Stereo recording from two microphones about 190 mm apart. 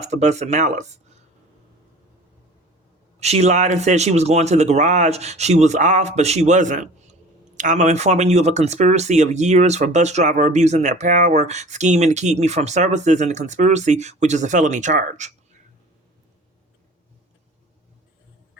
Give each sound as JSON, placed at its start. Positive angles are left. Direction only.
{"t": 0.0, "sound": "speech", "side_deg": -35}
{"t": 3.2, "sound": "speech", "side_deg": -35}